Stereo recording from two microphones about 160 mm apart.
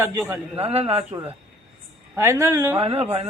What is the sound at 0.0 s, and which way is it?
Speech, 15° right (ahead or behind).